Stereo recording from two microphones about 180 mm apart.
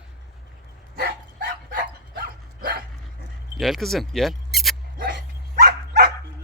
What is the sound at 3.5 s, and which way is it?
Speech, centre (ahead or behind).